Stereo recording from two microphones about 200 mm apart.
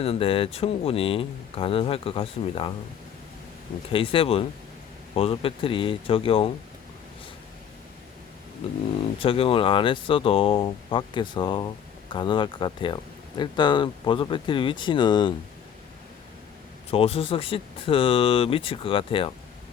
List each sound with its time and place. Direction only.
0.0 s speech: 30° left (ahead or behind)
3.9 s speech: 25° left (ahead or behind)
9.2 s speech: 25° left (ahead or behind)
16.9 s speech: 30° left (ahead or behind)